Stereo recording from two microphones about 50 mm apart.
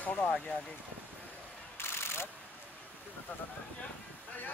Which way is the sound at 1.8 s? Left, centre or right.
Left.